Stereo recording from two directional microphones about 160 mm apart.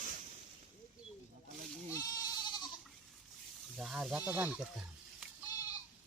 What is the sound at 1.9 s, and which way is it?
Goat, 25° left (ahead or behind).